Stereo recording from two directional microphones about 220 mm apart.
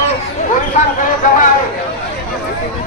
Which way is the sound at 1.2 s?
35° left (ahead or behind).